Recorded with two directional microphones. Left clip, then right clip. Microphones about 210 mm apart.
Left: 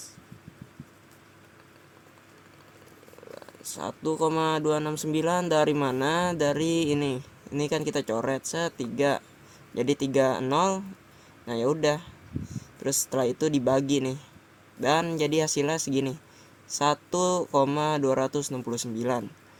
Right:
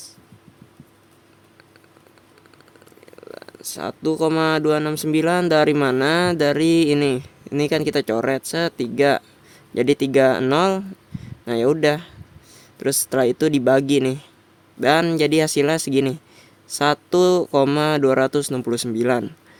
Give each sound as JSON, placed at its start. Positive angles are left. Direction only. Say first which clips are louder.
{"t": 3.7, "sound": "speech", "louder": "right 7 dB", "side_deg": -50}